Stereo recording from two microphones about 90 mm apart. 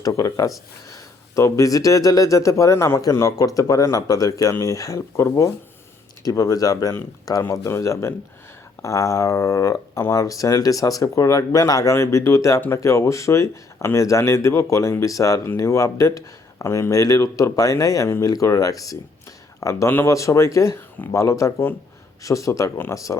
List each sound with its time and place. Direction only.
0.0 s speech: 35° left (ahead or behind)
6.2 s speech: 40° left (ahead or behind)
7.4 s speech: 30° left (ahead or behind)